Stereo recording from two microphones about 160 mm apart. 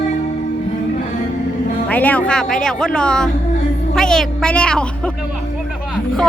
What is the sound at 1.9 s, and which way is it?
Speech, 10° left (ahead or behind).